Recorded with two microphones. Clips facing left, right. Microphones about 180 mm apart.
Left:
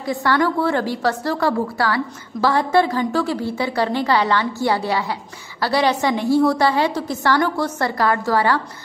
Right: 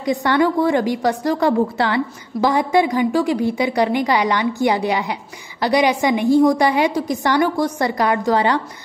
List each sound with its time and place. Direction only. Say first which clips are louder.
0.0 s a woman's voice: right 2 dB; 20° right (ahead or behind)